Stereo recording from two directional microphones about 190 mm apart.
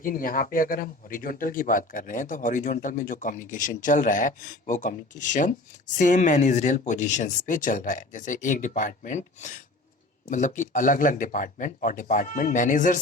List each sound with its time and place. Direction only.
0.0 s speech: 45° left (ahead or behind)